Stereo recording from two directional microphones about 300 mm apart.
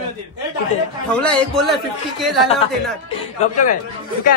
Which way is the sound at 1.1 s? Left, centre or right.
Centre.